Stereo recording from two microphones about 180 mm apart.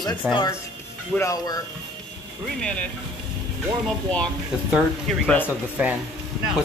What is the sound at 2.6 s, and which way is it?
Speech, 5° left (ahead or behind).